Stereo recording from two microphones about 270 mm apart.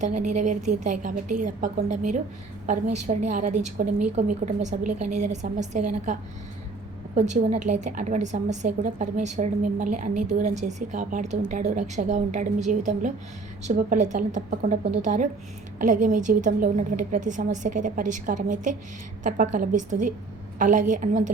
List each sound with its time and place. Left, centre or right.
0.3 s a woman's voice: right
7.2 s a woman's voice: right